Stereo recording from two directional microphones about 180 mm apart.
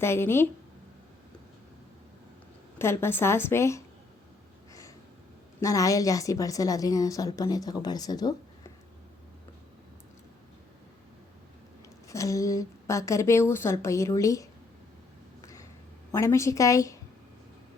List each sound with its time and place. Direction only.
0.0 s a woman's voice: 15° left (ahead or behind)
2.7 s a woman's voice: 15° left (ahead or behind)
5.5 s a woman's voice: 20° left (ahead or behind)
12.0 s a woman's voice: 15° left (ahead or behind)
16.1 s a woman's voice: 15° left (ahead or behind)